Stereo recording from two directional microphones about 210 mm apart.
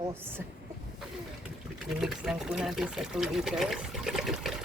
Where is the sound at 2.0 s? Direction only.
Centre (ahead or behind).